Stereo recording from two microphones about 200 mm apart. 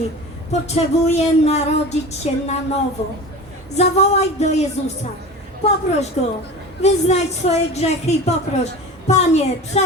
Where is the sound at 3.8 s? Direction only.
30° left (ahead or behind).